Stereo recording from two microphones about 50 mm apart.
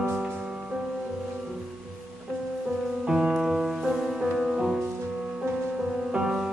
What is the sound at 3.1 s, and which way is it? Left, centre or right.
Music, centre.